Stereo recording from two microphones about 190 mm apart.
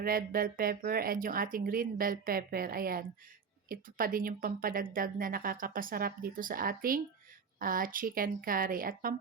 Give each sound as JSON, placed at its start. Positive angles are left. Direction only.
{"t": 0.0, "sound": "speech", "side_deg": -50}